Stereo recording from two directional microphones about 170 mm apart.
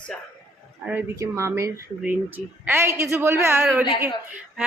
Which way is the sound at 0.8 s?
15° right (ahead or behind).